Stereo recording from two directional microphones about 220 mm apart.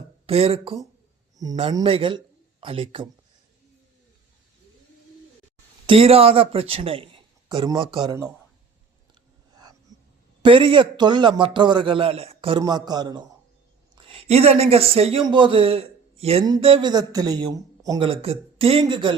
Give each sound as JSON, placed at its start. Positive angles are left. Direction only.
{"t": 0.3, "sound": "speech", "side_deg": -25}
{"t": 5.8, "sound": "speech", "side_deg": -25}
{"t": 10.4, "sound": "speech", "side_deg": -25}